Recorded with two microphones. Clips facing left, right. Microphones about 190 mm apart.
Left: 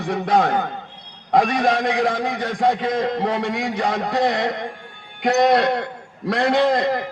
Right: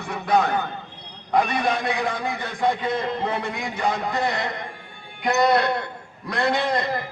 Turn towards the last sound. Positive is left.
turn(degrees=90)